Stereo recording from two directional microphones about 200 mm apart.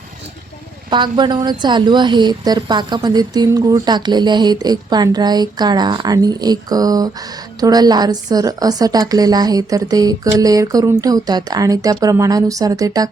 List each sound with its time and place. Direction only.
0.9 s a woman's voice: 25° right (ahead or behind)